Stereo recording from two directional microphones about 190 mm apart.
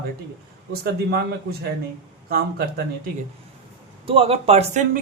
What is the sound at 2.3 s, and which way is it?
Speech, 55° right (ahead or behind).